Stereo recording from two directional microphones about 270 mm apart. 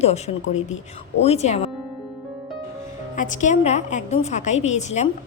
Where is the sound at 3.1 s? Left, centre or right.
Left.